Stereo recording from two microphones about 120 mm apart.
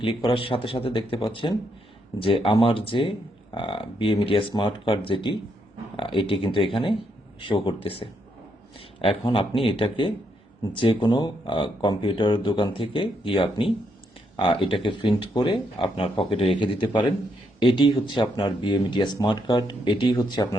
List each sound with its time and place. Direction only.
0.0 s speech: 50° left (ahead or behind)
16.6 s speech: 40° left (ahead or behind)